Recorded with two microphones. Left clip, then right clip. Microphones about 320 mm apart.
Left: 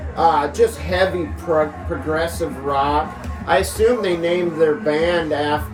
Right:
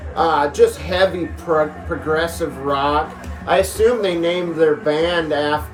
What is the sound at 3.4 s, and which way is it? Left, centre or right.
Speech, centre.